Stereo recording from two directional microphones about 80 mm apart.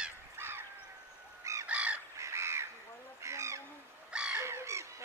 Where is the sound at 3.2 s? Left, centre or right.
Right.